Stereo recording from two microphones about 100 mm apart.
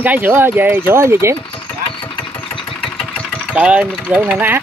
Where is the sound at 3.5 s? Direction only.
10° right (ahead or behind).